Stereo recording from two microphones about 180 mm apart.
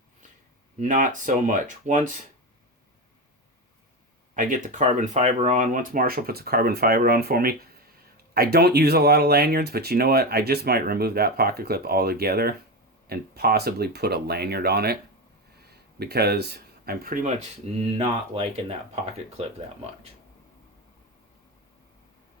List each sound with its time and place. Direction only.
0.8 s speech: 45° right (ahead or behind)
4.4 s speech: 45° right (ahead or behind)